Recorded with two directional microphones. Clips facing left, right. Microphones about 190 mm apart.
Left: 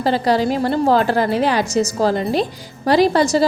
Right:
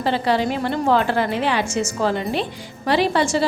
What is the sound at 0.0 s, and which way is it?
A woman's voice, 40° left (ahead or behind).